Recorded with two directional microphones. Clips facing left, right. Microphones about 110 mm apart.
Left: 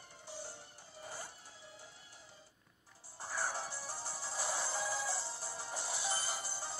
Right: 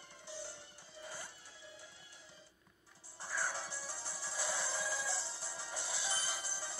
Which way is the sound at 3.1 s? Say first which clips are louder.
Left 1 dB; 40° left (ahead or behind).